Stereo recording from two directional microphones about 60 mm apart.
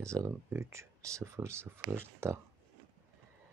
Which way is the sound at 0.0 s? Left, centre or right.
Right.